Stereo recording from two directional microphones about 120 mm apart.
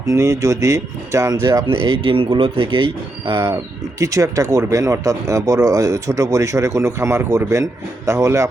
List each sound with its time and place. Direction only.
0.1 s speech: 30° right (ahead or behind)